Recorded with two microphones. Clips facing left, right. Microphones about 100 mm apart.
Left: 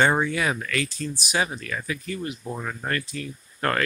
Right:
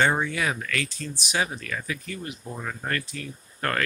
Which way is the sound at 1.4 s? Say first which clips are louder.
Right 1 dB; 20° left (ahead or behind).